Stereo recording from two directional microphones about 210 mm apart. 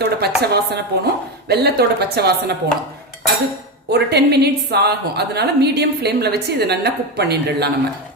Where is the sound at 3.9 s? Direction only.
50° right (ahead or behind).